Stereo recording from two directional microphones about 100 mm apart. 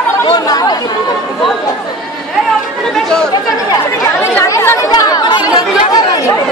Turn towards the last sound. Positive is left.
turn(degrees=40)  # may be behind; listen again after turning